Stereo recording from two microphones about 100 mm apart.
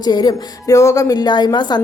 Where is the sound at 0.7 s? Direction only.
30° left (ahead or behind).